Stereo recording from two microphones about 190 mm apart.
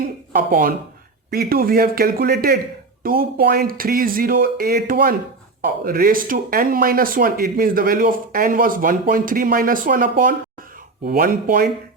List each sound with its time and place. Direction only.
0.0 s speech: 50° right (ahead or behind)